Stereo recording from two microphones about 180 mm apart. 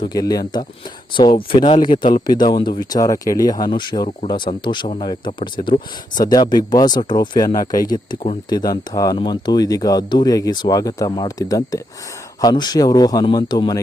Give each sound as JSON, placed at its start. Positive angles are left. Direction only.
{"t": 0.0, "sound": "speech", "side_deg": 20}